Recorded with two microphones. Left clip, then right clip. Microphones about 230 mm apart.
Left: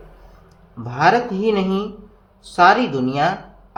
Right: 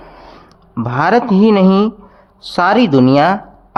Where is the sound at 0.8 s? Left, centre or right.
Right.